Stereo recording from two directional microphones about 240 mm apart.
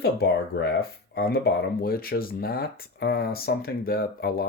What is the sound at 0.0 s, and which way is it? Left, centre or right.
Speech, left.